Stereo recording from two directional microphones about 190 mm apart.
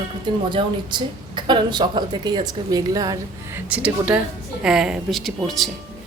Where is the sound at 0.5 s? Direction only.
25° right (ahead or behind).